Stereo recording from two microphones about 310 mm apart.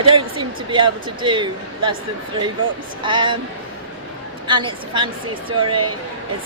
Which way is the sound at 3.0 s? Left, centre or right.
Centre.